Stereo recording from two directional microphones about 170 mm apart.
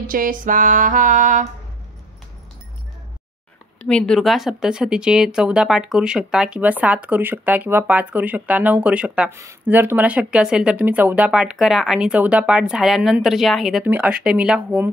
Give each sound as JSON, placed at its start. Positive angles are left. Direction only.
{"t": 0.0, "sound": "music", "side_deg": -55}
{"t": 3.8, "sound": "speech", "side_deg": 5}
{"t": 9.3, "sound": "speech", "side_deg": -15}